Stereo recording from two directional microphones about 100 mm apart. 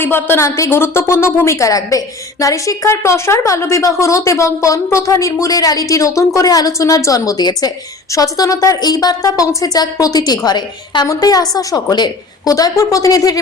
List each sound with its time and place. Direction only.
0.0 s a woman's voice: 20° left (ahead or behind)